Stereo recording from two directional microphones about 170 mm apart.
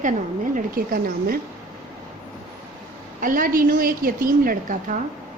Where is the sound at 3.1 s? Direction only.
55° right (ahead or behind).